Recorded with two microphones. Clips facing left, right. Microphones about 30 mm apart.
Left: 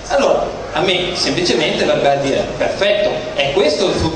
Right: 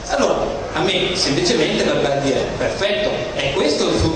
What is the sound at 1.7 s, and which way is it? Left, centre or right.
A man's voice, centre.